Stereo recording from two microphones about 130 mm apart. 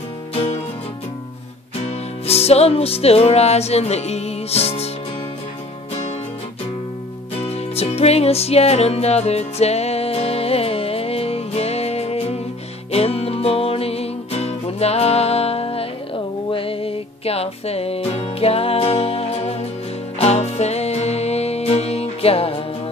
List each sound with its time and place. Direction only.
0.3 s music: 55° left (ahead or behind)
2.2 s music: 50° left (ahead or behind)
7.4 s music: 50° left (ahead or behind)